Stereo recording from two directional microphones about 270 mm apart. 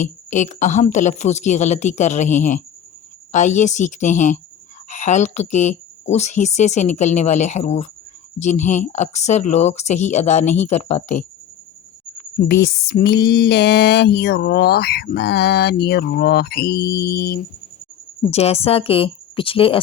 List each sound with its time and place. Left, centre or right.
0.0 s a woman's voice: left
12.7 s a sound: left
18.3 s a woman's voice: left